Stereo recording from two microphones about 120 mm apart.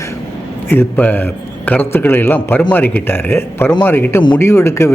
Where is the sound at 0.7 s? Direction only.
15° left (ahead or behind).